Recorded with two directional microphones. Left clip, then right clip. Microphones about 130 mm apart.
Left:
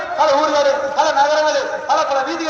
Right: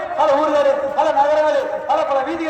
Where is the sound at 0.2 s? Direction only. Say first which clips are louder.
Left 1 dB; 60° right (ahead or behind).